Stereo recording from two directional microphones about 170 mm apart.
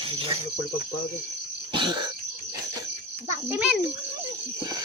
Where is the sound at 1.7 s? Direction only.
25° right (ahead or behind).